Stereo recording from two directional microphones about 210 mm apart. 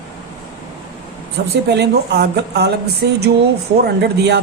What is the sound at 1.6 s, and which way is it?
Speech, 50° right (ahead or behind).